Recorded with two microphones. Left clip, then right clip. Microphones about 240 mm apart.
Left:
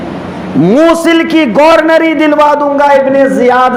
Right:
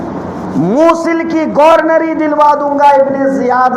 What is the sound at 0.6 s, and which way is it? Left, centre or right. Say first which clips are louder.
A man's voice: left 3 dB; left.